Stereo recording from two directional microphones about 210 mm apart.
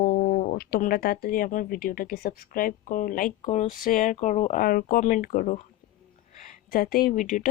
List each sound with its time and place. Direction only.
0.0 s speech: 45° left (ahead or behind)